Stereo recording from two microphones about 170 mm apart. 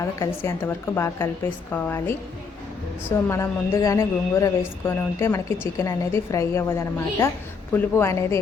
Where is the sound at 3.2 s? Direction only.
15° left (ahead or behind).